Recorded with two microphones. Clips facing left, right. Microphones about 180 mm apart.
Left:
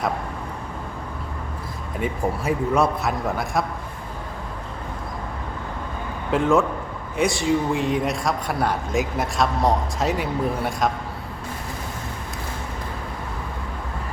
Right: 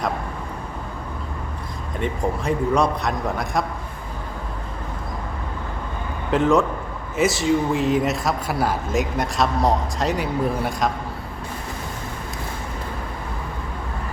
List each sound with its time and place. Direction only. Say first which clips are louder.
2.0 s speech: even; 5° left (ahead or behind)
6.3 s speech: right 1 dB; centre (ahead or behind)